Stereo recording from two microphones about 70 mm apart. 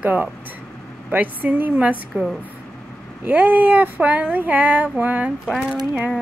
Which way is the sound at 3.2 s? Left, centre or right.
Right.